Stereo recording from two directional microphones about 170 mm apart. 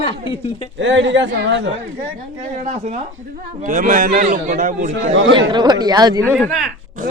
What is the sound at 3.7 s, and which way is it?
A man's voice, 50° right (ahead or behind).